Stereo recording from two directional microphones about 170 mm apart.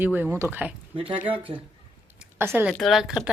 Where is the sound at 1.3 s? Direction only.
30° right (ahead or behind).